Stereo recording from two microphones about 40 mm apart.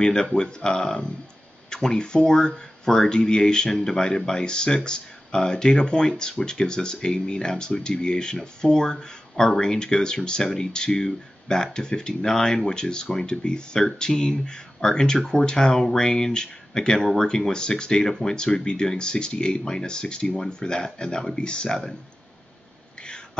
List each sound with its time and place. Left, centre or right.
0.0 s speech: centre